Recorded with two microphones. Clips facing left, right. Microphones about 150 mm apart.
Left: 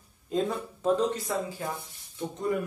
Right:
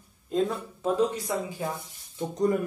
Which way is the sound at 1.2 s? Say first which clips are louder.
Right 1 dB; 20° right (ahead or behind).